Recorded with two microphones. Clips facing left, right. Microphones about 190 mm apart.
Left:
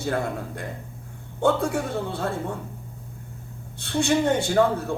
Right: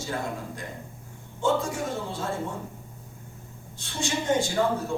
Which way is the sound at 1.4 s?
60° left (ahead or behind).